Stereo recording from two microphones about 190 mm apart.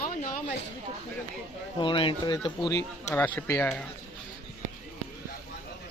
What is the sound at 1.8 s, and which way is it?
Speech, 25° left (ahead or behind).